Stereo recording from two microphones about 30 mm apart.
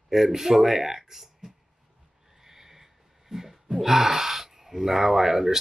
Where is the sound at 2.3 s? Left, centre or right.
Centre.